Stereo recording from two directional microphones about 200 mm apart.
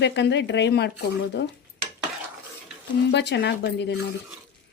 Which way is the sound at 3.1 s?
60° left (ahead or behind).